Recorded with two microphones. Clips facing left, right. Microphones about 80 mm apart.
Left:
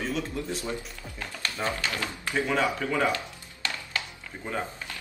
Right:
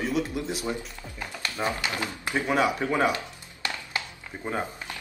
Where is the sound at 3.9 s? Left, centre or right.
Centre.